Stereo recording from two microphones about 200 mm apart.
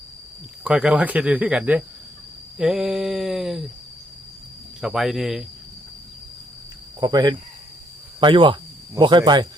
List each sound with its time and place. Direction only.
0.6 s speech: 5° right (ahead or behind)
4.8 s speech: centre (ahead or behind)
7.0 s speech: 20° right (ahead or behind)